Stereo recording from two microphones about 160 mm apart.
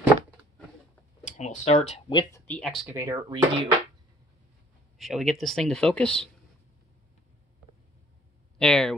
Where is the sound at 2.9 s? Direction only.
20° right (ahead or behind).